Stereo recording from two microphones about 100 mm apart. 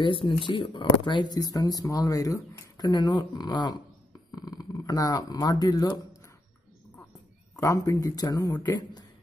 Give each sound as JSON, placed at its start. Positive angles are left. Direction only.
{"t": 0.0, "sound": "speech", "side_deg": 55}
{"t": 7.5, "sound": "a man's voice", "side_deg": 30}